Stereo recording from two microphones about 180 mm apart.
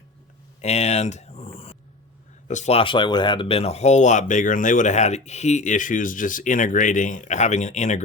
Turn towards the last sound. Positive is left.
turn(degrees=40)  # may be behind; listen again after turning